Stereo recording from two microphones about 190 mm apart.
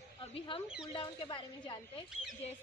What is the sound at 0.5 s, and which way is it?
A woman's voice, 25° left (ahead or behind).